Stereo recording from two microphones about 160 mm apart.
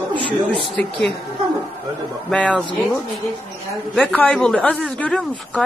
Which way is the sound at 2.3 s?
5° left (ahead or behind).